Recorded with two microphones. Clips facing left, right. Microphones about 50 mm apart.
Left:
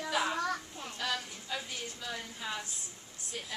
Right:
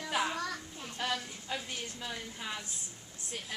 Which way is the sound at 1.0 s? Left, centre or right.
Centre.